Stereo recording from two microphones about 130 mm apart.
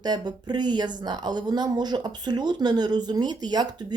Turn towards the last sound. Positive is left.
turn(degrees=-35)  # may be behind; listen again after turning